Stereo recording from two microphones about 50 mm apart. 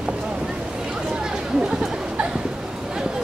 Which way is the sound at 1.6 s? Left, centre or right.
Centre.